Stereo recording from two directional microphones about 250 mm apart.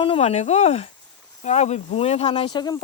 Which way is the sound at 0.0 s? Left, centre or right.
Left.